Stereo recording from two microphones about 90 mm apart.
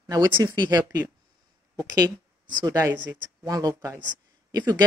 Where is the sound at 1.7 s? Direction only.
45° right (ahead or behind).